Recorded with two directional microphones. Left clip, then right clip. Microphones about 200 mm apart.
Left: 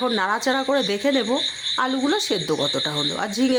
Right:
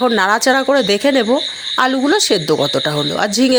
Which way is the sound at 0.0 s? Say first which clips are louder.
Right 8 dB; 30° right (ahead or behind).